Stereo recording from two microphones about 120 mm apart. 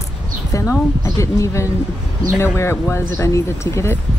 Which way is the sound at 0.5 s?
25° left (ahead or behind).